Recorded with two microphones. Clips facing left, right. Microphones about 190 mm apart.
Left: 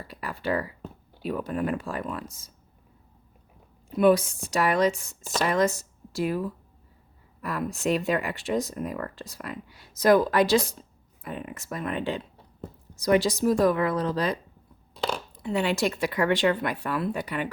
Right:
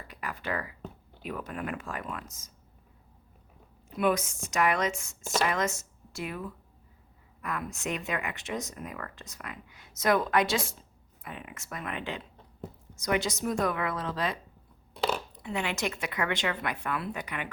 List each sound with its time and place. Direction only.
0.1 s a sound: 30° left (ahead or behind)
1.2 s speech: 30° left (ahead or behind)
3.8 s speech: 35° left (ahead or behind)
7.4 s speech: 35° left (ahead or behind)
15.4 s speech: 35° left (ahead or behind)